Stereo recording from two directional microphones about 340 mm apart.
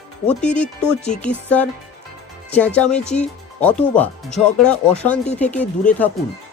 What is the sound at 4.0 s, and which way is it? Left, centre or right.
Speech, centre.